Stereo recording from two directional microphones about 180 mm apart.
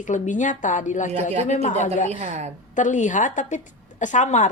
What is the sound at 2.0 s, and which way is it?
Speech, 40° right (ahead or behind).